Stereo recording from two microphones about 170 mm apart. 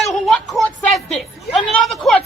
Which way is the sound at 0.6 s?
Centre (ahead or behind).